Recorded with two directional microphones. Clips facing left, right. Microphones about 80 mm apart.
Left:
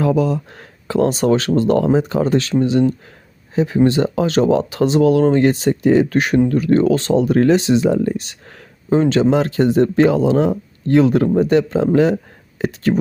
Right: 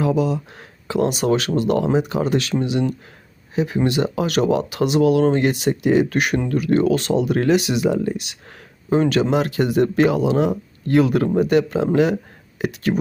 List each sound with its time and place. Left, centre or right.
0.0 s speech: left